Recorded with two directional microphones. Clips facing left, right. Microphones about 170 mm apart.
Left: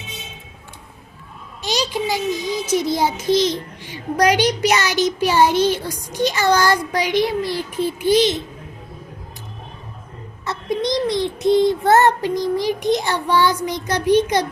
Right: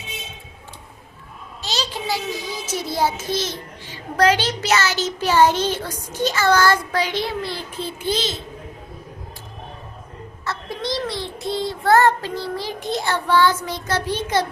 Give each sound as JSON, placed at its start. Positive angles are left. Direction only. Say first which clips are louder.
{"t": 1.6, "sound": "a child's voice", "louder": "left 5 dB", "side_deg": 15}
{"t": 10.4, "sound": "a child's voice", "louder": "left 6 dB", "side_deg": 20}